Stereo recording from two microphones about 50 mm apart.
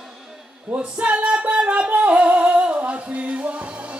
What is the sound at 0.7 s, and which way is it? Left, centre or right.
Singing, right.